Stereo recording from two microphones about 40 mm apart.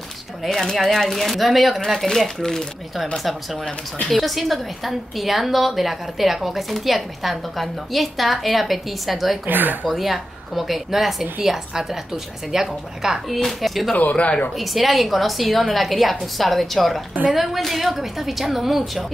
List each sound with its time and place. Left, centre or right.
0.4 s a woman's voice: centre
4.1 s a woman's voice: centre
9.5 s speech: right
9.9 s a woman's voice: centre
13.6 s a woman's voice: centre